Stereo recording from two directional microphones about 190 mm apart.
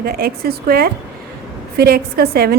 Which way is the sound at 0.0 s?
55° right (ahead or behind).